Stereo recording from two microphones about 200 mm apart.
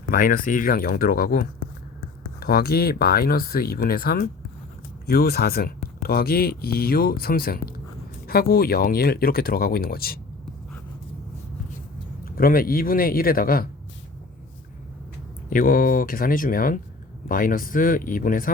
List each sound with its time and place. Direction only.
0.1 s speech: 45° left (ahead or behind)
12.2 s speech: 45° left (ahead or behind)
15.4 s speech: 45° left (ahead or behind)